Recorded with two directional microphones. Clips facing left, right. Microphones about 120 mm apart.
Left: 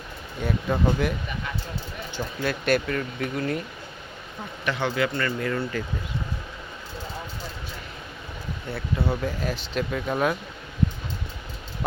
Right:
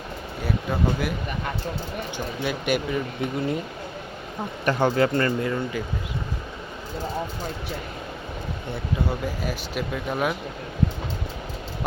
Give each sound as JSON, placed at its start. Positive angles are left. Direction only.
{"t": 0.4, "sound": "speech", "side_deg": -5}
{"t": 2.1, "sound": "speech", "side_deg": -15}
{"t": 4.6, "sound": "speech", "side_deg": -40}
{"t": 5.4, "sound": "speech", "side_deg": -20}
{"t": 8.7, "sound": "speech", "side_deg": -10}